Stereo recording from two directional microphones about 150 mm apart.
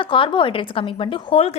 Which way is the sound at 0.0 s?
35° left (ahead or behind).